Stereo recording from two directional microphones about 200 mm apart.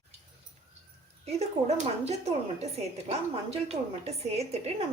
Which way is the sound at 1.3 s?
30° right (ahead or behind).